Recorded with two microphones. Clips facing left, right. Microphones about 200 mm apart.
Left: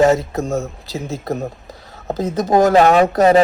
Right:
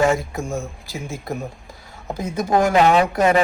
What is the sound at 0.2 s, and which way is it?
Speech, 20° left (ahead or behind).